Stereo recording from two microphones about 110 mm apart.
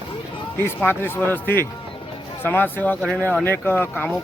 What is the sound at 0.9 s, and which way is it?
Speech, 20° left (ahead or behind).